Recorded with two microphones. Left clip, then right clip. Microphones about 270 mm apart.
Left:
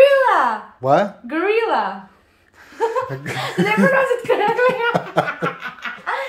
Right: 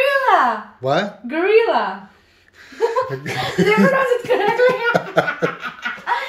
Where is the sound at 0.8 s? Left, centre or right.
Centre.